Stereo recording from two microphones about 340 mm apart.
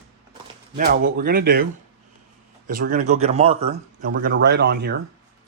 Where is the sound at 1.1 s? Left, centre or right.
Right.